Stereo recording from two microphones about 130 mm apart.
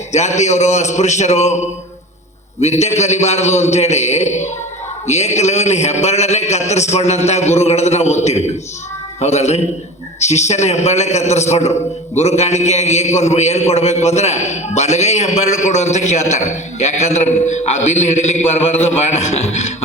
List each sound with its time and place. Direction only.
0.1 s a man's voice: 60° left (ahead or behind)